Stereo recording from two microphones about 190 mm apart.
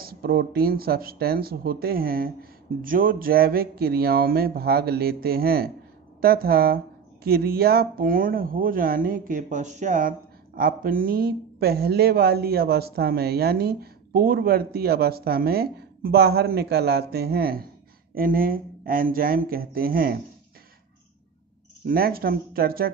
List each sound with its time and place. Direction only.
0.0 s speech: 55° right (ahead or behind)
21.8 s speech: 50° right (ahead or behind)